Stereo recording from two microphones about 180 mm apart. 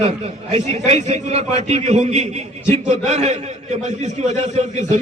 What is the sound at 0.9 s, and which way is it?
A man's voice, 40° right (ahead or behind).